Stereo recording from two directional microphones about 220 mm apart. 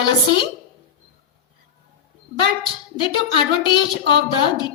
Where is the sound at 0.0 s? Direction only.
20° left (ahead or behind).